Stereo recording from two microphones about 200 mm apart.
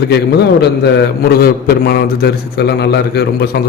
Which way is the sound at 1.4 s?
45° left (ahead or behind).